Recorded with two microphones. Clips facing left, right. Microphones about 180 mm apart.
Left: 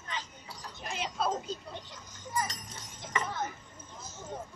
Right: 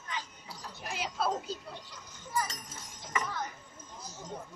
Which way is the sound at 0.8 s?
5° right (ahead or behind).